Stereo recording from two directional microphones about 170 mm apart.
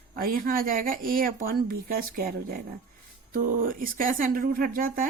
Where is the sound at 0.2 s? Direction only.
55° right (ahead or behind).